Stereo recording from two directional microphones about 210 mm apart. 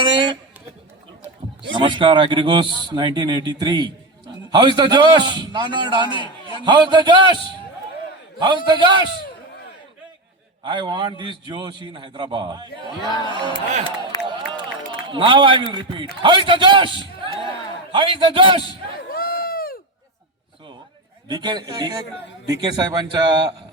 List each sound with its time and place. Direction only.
0.0 s speech: 25° right (ahead or behind)
1.7 s a man's voice: 25° right (ahead or behind)
6.1 s a man's voice: 25° left (ahead or behind)
6.7 s a man's voice: 20° right (ahead or behind)
8.4 s a man's voice: 20° right (ahead or behind)
10.6 s a man's voice: 20° right (ahead or behind)
13.1 s speech: 20° left (ahead or behind)
14.1 s a sound: 20° left (ahead or behind)
15.0 s a man's voice: 25° right (ahead or behind)
19.0 s a sound: 45° left (ahead or behind)
21.2 s a man's voice: 20° right (ahead or behind)